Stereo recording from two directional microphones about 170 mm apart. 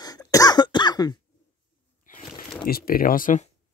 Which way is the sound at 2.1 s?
55° left (ahead or behind).